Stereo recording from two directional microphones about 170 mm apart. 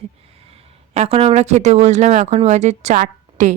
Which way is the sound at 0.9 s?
35° right (ahead or behind).